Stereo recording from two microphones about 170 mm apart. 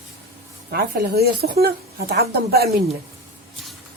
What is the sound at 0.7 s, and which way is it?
Speech, 65° right (ahead or behind).